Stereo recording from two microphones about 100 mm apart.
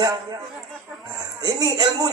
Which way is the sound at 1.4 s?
45° right (ahead or behind).